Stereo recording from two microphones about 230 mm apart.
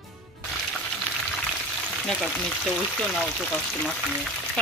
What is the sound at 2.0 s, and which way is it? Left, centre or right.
Speech, centre.